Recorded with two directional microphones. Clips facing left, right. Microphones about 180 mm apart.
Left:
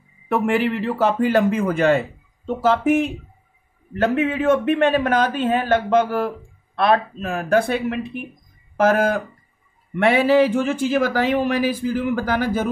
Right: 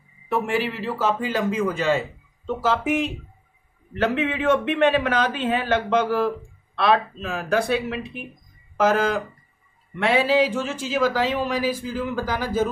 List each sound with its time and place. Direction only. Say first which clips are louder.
0.3 s speech: left 4 dB; 55° left (ahead or behind)
3.9 s a man's voice: left 3 dB; 45° left (ahead or behind)